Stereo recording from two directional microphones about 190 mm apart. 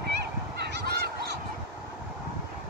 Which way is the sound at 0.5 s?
60° right (ahead or behind).